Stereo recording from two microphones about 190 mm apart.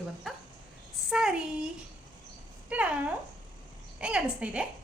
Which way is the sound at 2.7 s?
5° right (ahead or behind).